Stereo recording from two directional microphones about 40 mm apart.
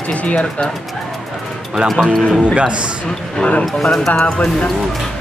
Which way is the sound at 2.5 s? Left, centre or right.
Right.